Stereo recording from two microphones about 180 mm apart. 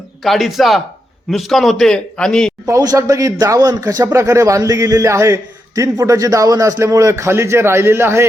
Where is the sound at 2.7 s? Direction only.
20° right (ahead or behind).